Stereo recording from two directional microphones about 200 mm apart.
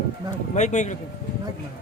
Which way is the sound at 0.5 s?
35° left (ahead or behind).